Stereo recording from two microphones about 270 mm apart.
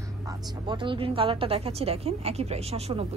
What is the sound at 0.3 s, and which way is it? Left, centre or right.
A woman's voice, centre.